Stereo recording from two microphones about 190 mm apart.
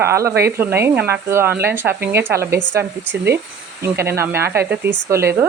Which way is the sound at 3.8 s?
15° right (ahead or behind).